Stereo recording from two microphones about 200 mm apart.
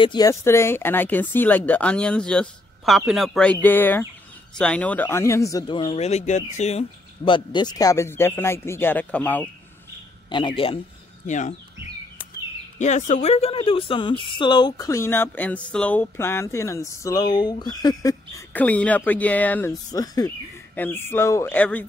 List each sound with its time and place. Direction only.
0.0 s a woman's voice: 20° left (ahead or behind)
10.3 s a man's voice: 25° left (ahead or behind)
11.2 s speech: 35° left (ahead or behind)
12.7 s a woman's voice: 35° left (ahead or behind); by 21.8 s 10° left (ahead or behind)